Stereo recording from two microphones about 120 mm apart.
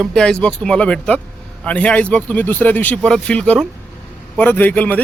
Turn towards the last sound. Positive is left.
turn(degrees=10)  # may be behind; listen again after turning